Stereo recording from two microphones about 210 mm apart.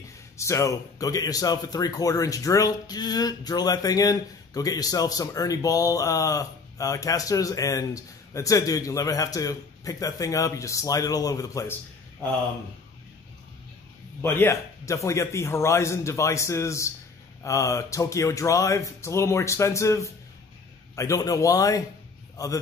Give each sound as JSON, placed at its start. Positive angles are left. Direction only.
{"t": 0.4, "sound": "speech", "side_deg": 15}
{"t": 14.2, "sound": "speech", "side_deg": 10}